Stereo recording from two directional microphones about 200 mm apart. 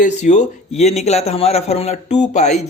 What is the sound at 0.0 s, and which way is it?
A man's voice, 35° left (ahead or behind).